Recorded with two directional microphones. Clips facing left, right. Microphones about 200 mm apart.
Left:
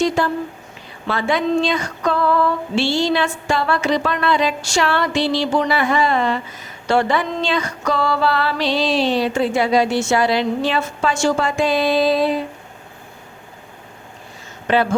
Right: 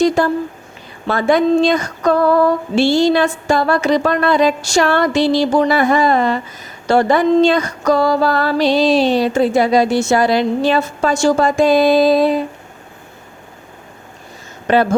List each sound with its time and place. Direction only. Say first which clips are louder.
0.2 s female singing: right 4 dB; 45° right (ahead or behind)
14.7 s female singing: right 4 dB; 45° right (ahead or behind)